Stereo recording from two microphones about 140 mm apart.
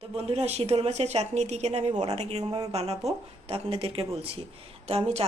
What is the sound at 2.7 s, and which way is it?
Speech, 50° right (ahead or behind).